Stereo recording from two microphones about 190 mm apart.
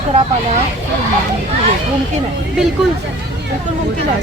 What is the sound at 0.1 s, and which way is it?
Speech, 35° right (ahead or behind).